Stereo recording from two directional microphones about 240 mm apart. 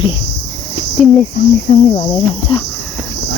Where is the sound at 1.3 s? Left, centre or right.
Left.